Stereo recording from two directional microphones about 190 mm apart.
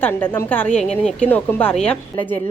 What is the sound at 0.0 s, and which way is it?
A woman's voice, 10° left (ahead or behind).